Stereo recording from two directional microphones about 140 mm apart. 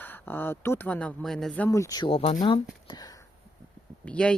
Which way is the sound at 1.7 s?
25° left (ahead or behind).